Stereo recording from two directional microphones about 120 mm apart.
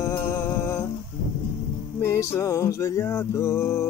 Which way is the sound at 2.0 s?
20° left (ahead or behind).